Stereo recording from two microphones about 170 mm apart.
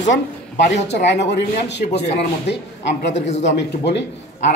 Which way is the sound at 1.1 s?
90° left.